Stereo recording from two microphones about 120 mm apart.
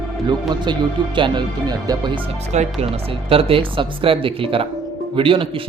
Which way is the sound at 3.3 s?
50° right (ahead or behind).